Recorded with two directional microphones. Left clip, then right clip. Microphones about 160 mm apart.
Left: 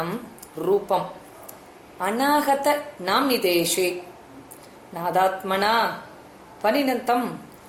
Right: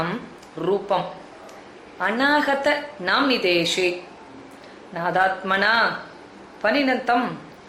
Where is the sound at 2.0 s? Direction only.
40° left (ahead or behind).